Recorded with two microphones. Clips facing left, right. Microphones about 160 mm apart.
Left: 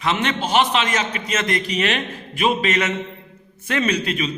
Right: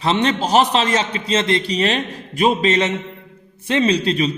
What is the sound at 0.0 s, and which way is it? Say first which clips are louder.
A man's voice: right 4 dB; 35° right (ahead or behind).